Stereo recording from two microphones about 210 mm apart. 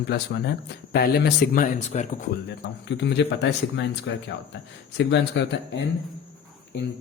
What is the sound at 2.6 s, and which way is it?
A man's voice, 55° left (ahead or behind).